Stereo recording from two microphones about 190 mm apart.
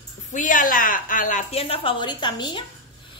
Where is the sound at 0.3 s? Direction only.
45° left (ahead or behind).